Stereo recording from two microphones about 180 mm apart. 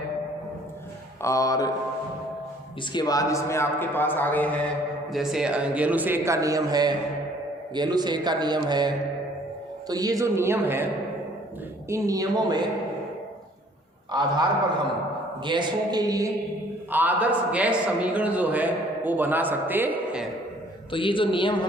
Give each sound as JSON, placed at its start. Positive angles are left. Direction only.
{"t": 1.2, "sound": "a man's voice", "side_deg": 15}
{"t": 2.9, "sound": "a man's voice", "side_deg": 20}
{"t": 5.1, "sound": "a man's voice", "side_deg": 0}
{"t": 9.9, "sound": "a man's voice", "side_deg": -20}
{"t": 11.9, "sound": "a man's voice", "side_deg": -15}
{"t": 14.1, "sound": "a man's voice", "side_deg": -25}
{"t": 15.4, "sound": "a man's voice", "side_deg": -25}
{"t": 16.9, "sound": "a man's voice", "side_deg": -10}
{"t": 20.9, "sound": "a man's voice", "side_deg": 30}